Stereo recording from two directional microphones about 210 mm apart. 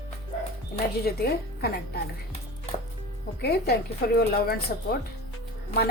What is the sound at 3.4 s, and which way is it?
Speech, 50° left (ahead or behind).